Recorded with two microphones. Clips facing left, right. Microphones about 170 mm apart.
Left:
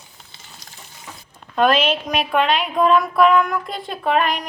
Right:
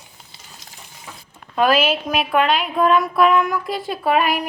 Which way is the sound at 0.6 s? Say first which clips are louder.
Right 1 dB; 25° right (ahead or behind).